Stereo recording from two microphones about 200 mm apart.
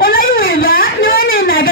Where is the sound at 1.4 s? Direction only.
45° left (ahead or behind).